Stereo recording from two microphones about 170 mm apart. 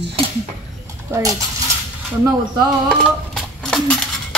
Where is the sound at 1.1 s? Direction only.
20° right (ahead or behind).